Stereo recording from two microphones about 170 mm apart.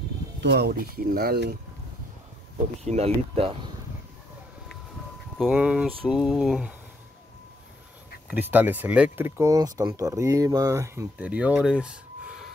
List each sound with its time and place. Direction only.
0.4 s speech: 80° right
2.8 s speech: 40° right (ahead or behind)
5.4 s speech: 5° right (ahead or behind)
8.3 s speech: 10° right (ahead or behind)